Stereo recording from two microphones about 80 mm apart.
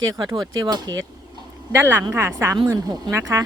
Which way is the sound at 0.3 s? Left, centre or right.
Right.